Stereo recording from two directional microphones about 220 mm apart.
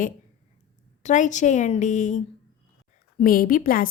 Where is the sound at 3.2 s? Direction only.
40° left (ahead or behind).